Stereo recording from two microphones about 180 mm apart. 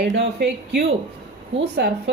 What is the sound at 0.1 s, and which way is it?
A woman's voice, 65° right (ahead or behind).